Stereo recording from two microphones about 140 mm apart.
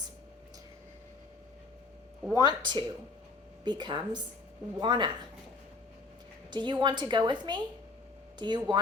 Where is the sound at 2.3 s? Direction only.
30° right (ahead or behind).